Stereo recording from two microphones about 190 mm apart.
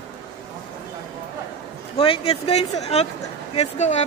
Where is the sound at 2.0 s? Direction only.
30° left (ahead or behind).